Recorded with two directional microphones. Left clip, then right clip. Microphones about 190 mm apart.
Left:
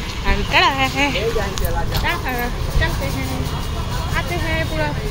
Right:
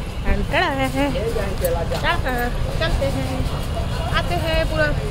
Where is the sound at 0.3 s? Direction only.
25° right (ahead or behind).